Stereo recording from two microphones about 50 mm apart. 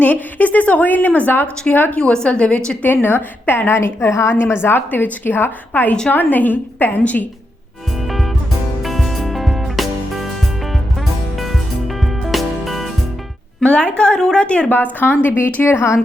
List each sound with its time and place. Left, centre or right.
0.0 s a woman's voice: left
2.3 s a woman's voice: left
2.8 s a woman's voice: left
4.6 s a woman's voice: left
7.0 s a woman's voice: left
8.8 s music: centre
11.3 s music: centre
13.6 s a woman's voice: left
14.7 s a woman's voice: left
15.6 s a woman's voice: left